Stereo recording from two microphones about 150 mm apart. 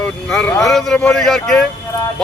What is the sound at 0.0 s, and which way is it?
A man's voice, 5° left (ahead or behind).